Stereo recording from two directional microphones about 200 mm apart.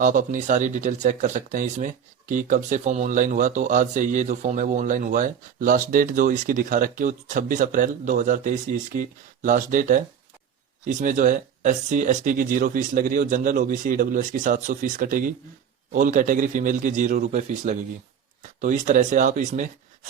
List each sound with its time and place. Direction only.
0.0 s speech: 40° right (ahead or behind)